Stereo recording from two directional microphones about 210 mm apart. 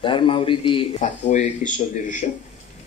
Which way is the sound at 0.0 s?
25° left (ahead or behind).